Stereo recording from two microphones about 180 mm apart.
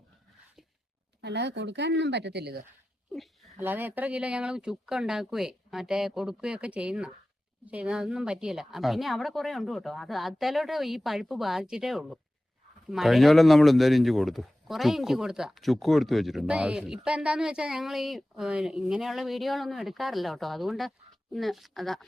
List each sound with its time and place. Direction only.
1.2 s speech: 70° right (ahead or behind)
3.6 s a man's voice: 10° right (ahead or behind)